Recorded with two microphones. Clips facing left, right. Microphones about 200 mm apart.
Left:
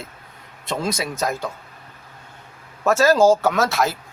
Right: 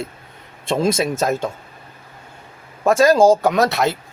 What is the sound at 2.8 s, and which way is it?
Speech, 30° right (ahead or behind).